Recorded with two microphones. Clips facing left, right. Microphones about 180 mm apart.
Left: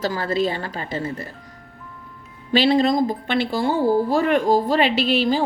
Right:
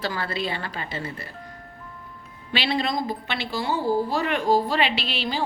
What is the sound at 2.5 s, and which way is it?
A woman's voice, 45° left (ahead or behind).